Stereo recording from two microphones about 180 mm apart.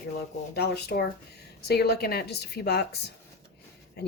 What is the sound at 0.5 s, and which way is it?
Speech, 65° left (ahead or behind).